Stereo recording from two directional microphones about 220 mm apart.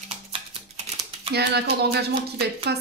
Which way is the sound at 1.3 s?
50° right (ahead or behind).